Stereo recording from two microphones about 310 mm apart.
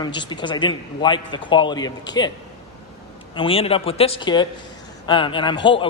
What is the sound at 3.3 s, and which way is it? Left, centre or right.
Speech, centre.